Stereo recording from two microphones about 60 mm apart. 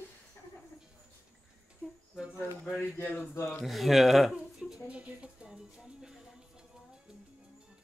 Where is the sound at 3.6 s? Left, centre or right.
Centre.